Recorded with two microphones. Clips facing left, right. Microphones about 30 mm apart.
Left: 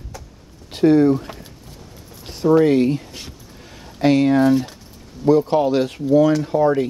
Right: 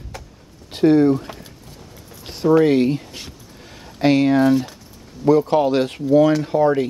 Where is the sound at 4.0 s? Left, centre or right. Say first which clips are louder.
Even; right.